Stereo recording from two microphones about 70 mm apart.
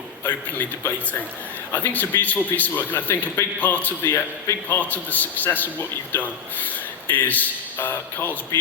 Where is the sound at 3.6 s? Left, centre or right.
Left.